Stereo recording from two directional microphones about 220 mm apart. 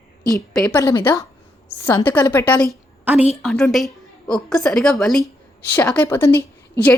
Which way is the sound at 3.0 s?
10° right (ahead or behind).